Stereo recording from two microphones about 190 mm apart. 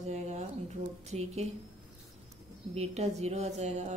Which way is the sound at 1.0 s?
35° right (ahead or behind).